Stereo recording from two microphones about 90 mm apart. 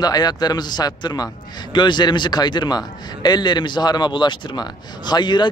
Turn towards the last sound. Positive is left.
turn(degrees=55)  # may be behind; listen again after turning